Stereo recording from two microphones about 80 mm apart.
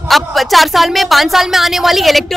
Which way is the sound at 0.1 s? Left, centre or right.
Centre.